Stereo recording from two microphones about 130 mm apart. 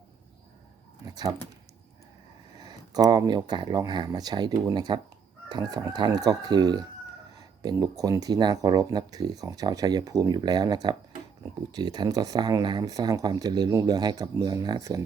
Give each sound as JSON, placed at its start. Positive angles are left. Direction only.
{"t": 1.0, "sound": "speech", "side_deg": -30}
{"t": 2.6, "sound": "speech", "side_deg": -30}